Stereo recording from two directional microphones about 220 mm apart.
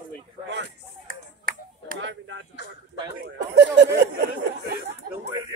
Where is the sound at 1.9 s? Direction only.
55° right (ahead or behind).